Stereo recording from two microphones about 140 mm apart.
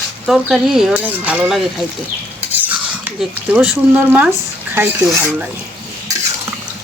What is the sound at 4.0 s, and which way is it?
Speech, 15° right (ahead or behind).